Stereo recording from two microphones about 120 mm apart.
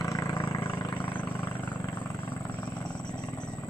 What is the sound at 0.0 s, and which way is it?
Vehicle, 30° left (ahead or behind).